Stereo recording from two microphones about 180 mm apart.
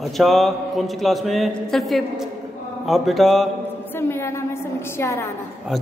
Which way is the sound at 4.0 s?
15° left (ahead or behind).